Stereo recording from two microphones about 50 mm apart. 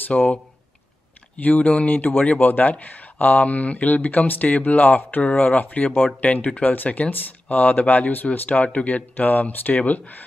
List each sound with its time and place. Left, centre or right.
0.1 s speech: centre
1.4 s speech: left